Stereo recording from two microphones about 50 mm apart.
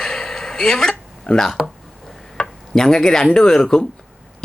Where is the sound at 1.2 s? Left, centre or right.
Centre.